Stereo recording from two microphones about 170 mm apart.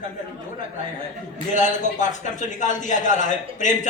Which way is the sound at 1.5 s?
45° left (ahead or behind).